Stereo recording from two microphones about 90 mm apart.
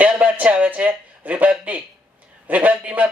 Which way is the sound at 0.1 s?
15° right (ahead or behind).